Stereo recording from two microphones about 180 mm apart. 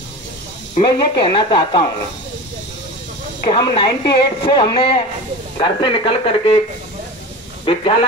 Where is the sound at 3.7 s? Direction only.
25° left (ahead or behind).